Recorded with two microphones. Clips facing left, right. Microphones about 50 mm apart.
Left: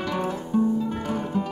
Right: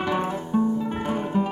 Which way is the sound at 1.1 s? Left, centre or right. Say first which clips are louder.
Right 4 dB; right.